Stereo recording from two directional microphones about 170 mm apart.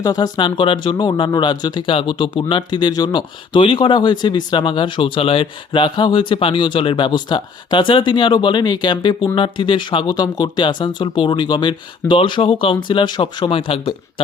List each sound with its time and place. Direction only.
0.0 s speech: 25° left (ahead or behind)